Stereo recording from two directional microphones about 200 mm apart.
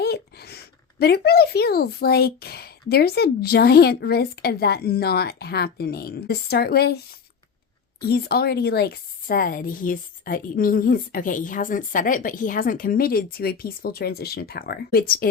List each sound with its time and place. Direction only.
0.0 s a woman's voice: 55° left (ahead or behind)
8.0 s a woman's voice: 50° left (ahead or behind)